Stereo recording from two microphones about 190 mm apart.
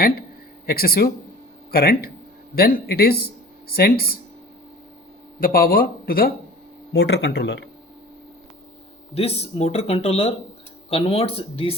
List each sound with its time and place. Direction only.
0.7 s speech: 50° left (ahead or behind)
5.4 s speech: 50° left (ahead or behind)
9.1 s speech: 30° left (ahead or behind)